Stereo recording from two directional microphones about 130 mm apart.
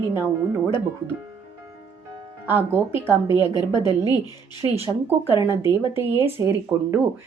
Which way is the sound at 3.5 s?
35° left (ahead or behind).